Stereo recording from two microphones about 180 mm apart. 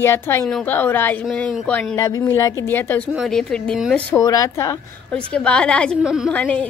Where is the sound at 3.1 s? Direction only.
Centre (ahead or behind).